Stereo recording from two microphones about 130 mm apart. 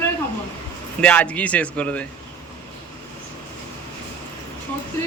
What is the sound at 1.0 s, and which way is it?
A man's voice, 10° left (ahead or behind).